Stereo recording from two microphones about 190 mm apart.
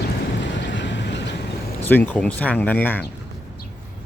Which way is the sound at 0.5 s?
70° left (ahead or behind).